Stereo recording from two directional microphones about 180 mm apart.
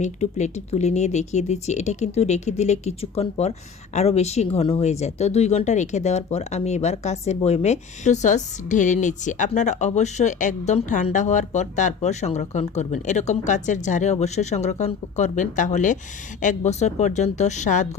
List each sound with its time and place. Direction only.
0.0 s speech: 40° left (ahead or behind)